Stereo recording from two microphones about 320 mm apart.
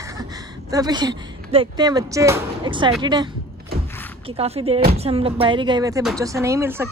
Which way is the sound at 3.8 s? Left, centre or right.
Centre.